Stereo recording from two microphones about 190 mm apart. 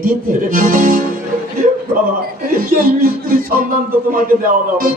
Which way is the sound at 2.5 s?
50° right (ahead or behind).